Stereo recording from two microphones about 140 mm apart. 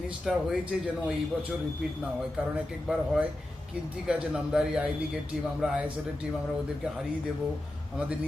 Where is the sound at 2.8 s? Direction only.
5° right (ahead or behind).